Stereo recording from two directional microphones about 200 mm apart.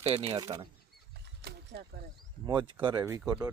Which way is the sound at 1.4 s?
55° right (ahead or behind).